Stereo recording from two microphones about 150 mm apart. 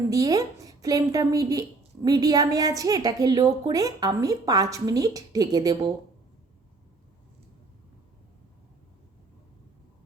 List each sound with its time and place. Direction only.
0.1 s a woman's voice: 25° right (ahead or behind)